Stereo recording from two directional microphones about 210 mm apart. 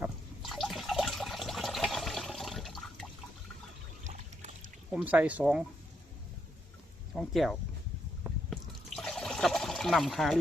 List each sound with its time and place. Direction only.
0.0 s water: centre (ahead or behind)
4.0 s pour: 35° right (ahead or behind)
4.9 s speech: 5° right (ahead or behind)
7.1 s speech: centre (ahead or behind)
9.0 s water: centre (ahead or behind)